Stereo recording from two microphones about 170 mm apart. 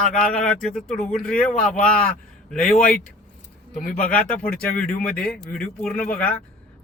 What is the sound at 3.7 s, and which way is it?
Speech, 50° left (ahead or behind).